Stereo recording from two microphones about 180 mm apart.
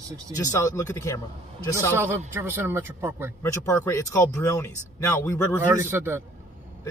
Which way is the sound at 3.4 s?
15° left (ahead or behind).